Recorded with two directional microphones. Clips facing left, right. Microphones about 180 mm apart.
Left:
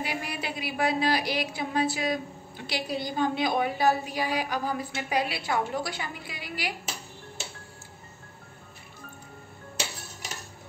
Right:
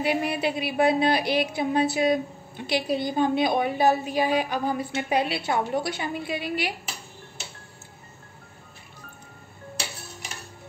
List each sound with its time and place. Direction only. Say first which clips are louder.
0.0 s a woman's voice: right 8 dB; 25° right (ahead or behind)